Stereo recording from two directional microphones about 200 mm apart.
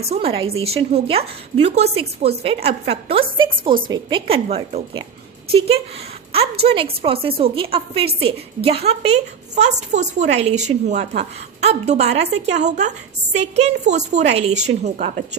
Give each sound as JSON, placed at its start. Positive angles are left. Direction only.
{"t": 0.0, "sound": "a woman's voice", "side_deg": -30}